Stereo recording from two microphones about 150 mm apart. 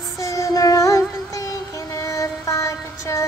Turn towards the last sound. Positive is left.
turn(degrees=20)  # may be behind; listen again after turning